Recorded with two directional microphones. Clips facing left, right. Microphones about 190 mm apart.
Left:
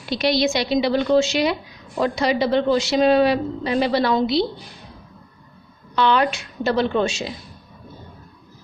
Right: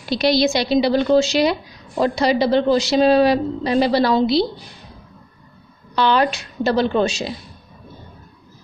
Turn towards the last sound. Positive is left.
turn(degrees=-35)  # may be behind; listen again after turning